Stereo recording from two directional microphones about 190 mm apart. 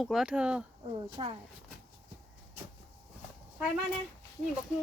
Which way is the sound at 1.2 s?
30° right (ahead or behind).